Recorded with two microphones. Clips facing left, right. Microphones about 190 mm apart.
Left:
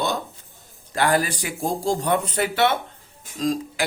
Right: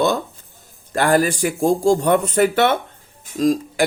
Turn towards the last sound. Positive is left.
turn(degrees=-50)  # may be behind; listen again after turning